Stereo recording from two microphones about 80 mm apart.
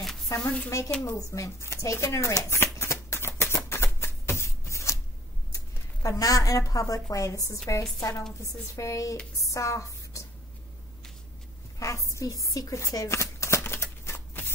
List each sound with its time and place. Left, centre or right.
0.0 s a sound: centre
0.7 s a woman's voice: left
1.0 s shuffling cards: left
6.0 s a woman's voice: left
11.8 s shuffling cards: left